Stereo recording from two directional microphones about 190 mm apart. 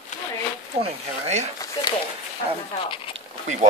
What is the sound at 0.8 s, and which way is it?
Speech, 35° right (ahead or behind).